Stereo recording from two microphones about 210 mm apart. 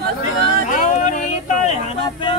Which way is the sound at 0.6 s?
35° left (ahead or behind).